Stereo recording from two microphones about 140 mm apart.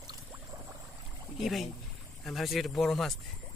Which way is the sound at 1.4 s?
Centre (ahead or behind).